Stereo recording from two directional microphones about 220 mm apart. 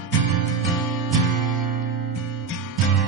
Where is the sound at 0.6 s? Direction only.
Centre (ahead or behind).